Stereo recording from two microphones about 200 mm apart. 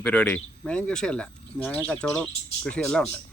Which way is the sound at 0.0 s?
5° left (ahead or behind).